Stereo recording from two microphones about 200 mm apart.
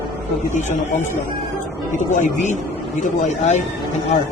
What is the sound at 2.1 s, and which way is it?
Speech, 40° left (ahead or behind).